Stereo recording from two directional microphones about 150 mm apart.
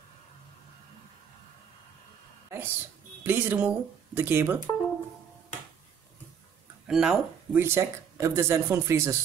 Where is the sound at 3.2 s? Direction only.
15° right (ahead or behind).